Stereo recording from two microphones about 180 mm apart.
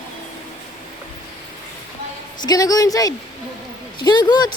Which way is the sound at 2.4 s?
20° left (ahead or behind).